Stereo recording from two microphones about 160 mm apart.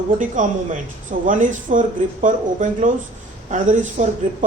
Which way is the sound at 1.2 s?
55° right (ahead or behind).